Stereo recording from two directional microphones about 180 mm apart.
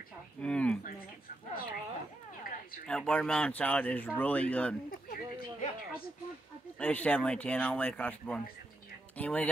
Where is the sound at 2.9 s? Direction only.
5° left (ahead or behind).